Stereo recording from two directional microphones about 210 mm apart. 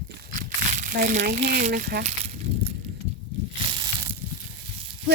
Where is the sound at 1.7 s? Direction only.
50° right (ahead or behind).